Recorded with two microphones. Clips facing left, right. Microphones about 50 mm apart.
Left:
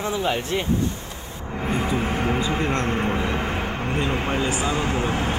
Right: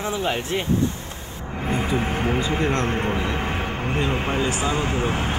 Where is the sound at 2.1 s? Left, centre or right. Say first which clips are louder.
Even; right.